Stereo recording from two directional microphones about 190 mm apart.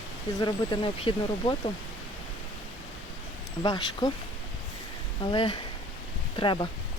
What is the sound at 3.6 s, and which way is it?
Speech, 20° left (ahead or behind).